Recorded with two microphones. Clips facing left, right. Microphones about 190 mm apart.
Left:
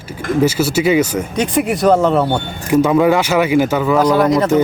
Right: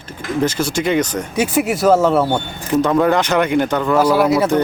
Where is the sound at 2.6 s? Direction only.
10° left (ahead or behind).